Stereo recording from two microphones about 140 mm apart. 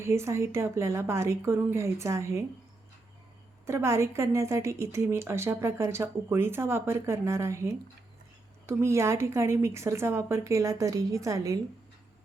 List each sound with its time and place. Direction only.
0.0 s a woman's voice: 20° right (ahead or behind)
3.7 s a woman's voice: 20° right (ahead or behind)
8.8 s a woman's voice: 20° right (ahead or behind)